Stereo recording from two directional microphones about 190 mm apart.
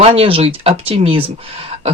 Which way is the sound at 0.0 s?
30° right (ahead or behind).